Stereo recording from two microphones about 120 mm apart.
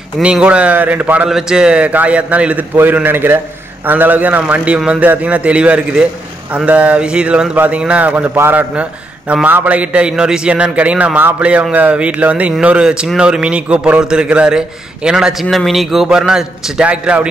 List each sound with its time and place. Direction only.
0.2 s a man's voice: 10° right (ahead or behind)